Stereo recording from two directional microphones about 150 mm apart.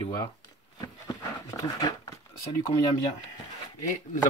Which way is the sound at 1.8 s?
25° left (ahead or behind).